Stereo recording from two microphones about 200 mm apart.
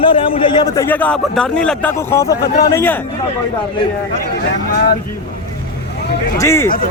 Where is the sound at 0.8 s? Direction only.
10° left (ahead or behind).